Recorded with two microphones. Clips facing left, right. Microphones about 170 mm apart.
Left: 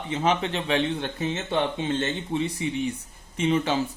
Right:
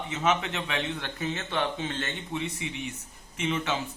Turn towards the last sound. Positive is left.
turn(degrees=35)  # may be behind; listen again after turning